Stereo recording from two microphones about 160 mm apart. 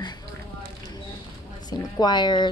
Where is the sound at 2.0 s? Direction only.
30° left (ahead or behind).